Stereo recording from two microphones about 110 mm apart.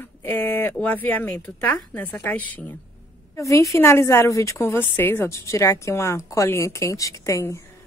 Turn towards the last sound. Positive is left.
turn(degrees=30)  # may be behind; listen again after turning